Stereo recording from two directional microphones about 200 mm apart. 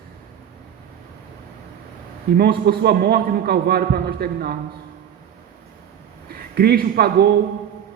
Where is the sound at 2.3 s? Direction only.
55° right (ahead or behind).